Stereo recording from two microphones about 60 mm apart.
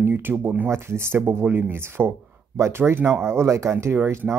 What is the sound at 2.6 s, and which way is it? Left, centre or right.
Speech, right.